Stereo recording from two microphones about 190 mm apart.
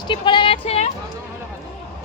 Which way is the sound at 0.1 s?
25° left (ahead or behind).